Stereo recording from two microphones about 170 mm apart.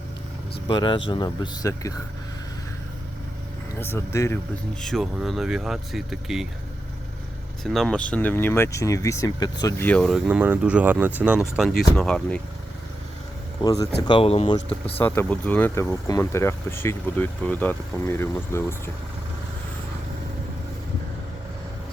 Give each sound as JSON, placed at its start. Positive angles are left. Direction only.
{"t": 0.7, "sound": "speech", "side_deg": 30}
{"t": 3.8, "sound": "speech", "side_deg": 15}
{"t": 4.8, "sound": "speech", "side_deg": 0}
{"t": 7.6, "sound": "speech", "side_deg": 0}
{"t": 10.2, "sound": "speech", "side_deg": -10}
{"t": 13.6, "sound": "speech", "side_deg": 20}
{"t": 14.2, "sound": "speech", "side_deg": 35}
{"t": 14.9, "sound": "speech", "side_deg": 10}